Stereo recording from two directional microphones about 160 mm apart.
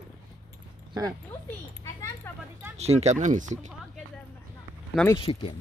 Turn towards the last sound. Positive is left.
turn(degrees=35)  # may be behind; listen again after turning